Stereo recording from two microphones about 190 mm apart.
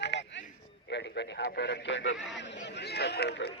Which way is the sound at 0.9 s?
65° left (ahead or behind).